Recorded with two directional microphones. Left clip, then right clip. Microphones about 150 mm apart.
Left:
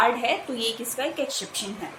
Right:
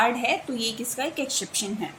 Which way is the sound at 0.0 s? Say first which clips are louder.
Left 1 dB; 45° right (ahead or behind).